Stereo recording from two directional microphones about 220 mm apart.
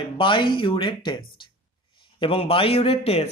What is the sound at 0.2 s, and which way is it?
A man's voice, 20° left (ahead or behind).